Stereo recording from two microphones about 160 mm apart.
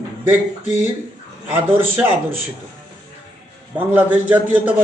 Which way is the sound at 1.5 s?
10° right (ahead or behind).